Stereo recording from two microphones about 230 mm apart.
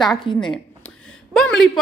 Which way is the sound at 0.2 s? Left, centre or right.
Left.